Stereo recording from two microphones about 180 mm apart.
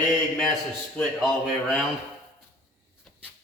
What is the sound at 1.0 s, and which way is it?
Speech, centre (ahead or behind).